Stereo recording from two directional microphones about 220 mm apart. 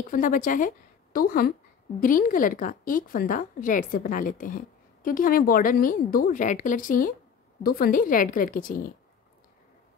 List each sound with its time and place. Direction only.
0.1 s a woman's voice: 40° left (ahead or behind)